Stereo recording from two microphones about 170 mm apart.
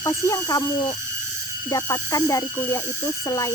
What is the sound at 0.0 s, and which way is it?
Speech, 20° left (ahead or behind).